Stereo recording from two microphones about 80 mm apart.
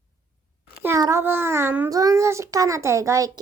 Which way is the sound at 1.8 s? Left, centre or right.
Right.